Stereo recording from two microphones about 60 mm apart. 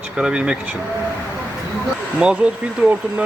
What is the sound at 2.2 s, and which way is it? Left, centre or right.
Speech, centre.